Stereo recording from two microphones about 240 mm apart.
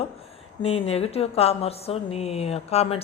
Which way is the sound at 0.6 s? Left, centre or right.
Left.